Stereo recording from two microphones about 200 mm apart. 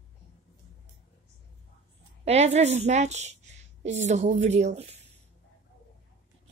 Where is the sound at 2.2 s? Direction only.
30° right (ahead or behind).